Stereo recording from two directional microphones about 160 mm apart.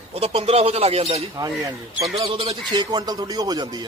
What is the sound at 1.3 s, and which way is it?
A man's voice, 20° right (ahead or behind).